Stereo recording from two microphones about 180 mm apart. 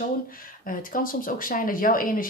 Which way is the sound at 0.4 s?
50° left (ahead or behind).